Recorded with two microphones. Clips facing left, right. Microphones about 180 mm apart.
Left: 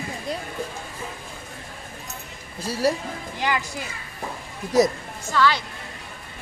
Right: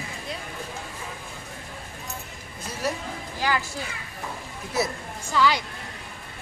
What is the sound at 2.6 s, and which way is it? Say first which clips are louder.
Speech: left 7 dB; 35° left (ahead or behind).